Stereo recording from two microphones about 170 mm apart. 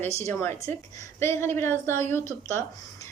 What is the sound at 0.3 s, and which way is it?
A woman's voice, 15° left (ahead or behind).